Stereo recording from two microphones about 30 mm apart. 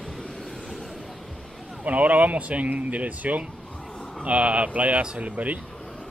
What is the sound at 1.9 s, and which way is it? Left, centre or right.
Speech, right.